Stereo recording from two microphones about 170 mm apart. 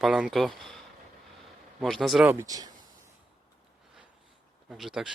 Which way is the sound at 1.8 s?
Centre (ahead or behind).